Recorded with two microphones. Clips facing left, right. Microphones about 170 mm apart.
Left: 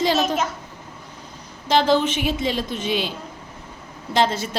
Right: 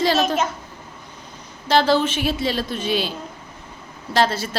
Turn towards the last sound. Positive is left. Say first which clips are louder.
# even
turn(degrees=20)  # may be behind; listen again after turning